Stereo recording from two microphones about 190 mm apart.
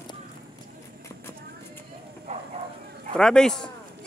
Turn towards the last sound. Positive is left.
turn(degrees=5)  # may be behind; listen again after turning